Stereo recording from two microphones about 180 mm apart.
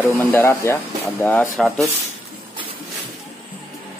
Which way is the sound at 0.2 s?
10° left (ahead or behind).